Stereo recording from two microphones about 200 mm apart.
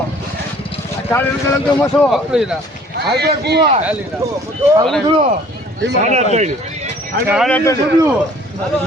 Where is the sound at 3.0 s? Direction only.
55° right (ahead or behind).